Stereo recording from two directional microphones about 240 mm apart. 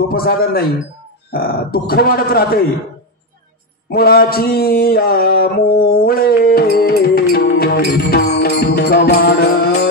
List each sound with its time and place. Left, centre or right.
0.1 s speech: left
3.9 s a sound: left
8.4 s music: left